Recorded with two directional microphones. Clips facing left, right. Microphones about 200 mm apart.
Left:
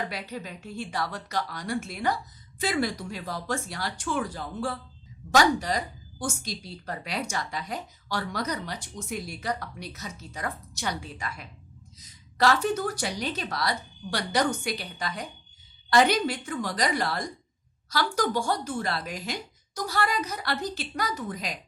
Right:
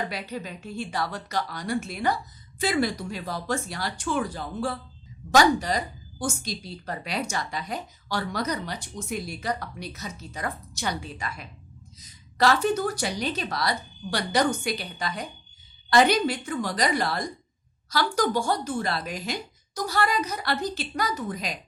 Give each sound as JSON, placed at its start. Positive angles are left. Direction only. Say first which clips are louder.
{"t": 0.0, "sound": "speech", "louder": "right 2 dB", "side_deg": -25}
{"t": 6.4, "sound": "a woman's voice", "louder": "right 2 dB", "side_deg": -90}
{"t": 6.8, "sound": "speech", "louder": "right 2 dB", "side_deg": -25}